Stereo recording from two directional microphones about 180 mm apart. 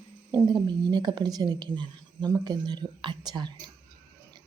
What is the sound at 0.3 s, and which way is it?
Speech, 25° right (ahead or behind).